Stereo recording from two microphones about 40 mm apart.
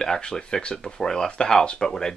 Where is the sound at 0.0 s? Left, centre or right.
Centre.